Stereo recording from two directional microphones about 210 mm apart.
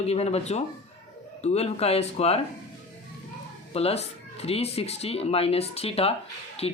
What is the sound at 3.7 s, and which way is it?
Speech, 30° left (ahead or behind).